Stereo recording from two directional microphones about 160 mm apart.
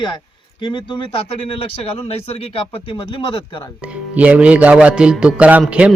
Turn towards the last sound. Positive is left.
turn(degrees=-5)  # may be behind; listen again after turning